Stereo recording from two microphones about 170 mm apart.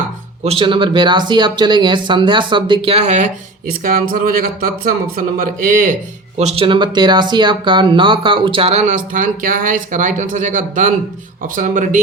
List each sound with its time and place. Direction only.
0.4 s speech: 30° right (ahead or behind)
3.7 s speech: 55° right (ahead or behind)